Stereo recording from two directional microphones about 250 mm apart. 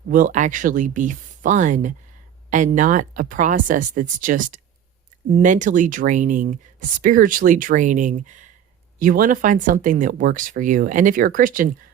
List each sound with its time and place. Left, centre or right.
0.1 s speech: right